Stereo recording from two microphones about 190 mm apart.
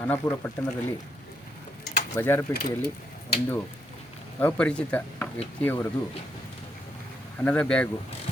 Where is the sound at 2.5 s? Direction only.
55° left (ahead or behind).